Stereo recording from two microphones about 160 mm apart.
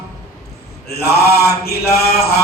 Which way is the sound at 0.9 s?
75° left (ahead or behind).